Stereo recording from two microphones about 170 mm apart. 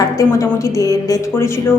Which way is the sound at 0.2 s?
20° left (ahead or behind).